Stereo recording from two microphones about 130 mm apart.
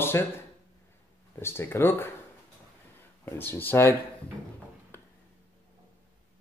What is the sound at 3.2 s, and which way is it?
Speech, 15° left (ahead or behind).